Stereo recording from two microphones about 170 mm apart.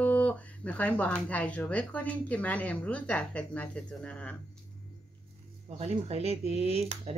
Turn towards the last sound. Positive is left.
turn(degrees=-40)  # may be behind; listen again after turning